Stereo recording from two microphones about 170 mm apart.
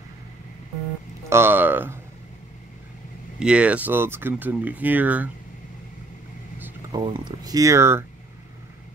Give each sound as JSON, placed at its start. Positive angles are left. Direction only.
{"t": 1.3, "sound": "speech", "side_deg": -15}
{"t": 3.3, "sound": "speech", "side_deg": -5}
{"t": 6.9, "sound": "speech", "side_deg": -25}